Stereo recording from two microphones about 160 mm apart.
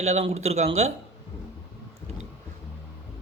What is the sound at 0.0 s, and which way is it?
Speech, 40° right (ahead or behind).